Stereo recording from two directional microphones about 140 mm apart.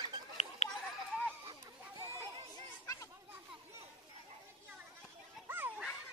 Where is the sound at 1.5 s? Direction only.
25° right (ahead or behind).